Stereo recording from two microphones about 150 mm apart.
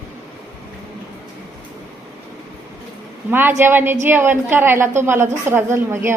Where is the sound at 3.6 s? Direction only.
15° right (ahead or behind).